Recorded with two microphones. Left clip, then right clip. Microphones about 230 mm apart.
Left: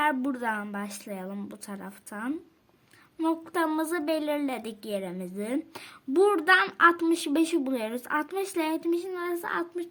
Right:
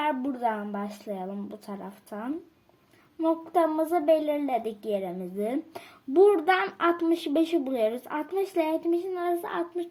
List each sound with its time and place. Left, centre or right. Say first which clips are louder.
0.1 s a woman's voice: right 1 dB; left